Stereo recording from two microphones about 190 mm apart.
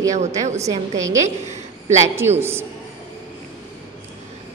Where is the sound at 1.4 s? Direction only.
35° right (ahead or behind).